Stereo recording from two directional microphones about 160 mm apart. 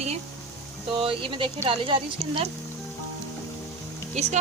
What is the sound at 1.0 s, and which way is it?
Speech, 30° right (ahead or behind).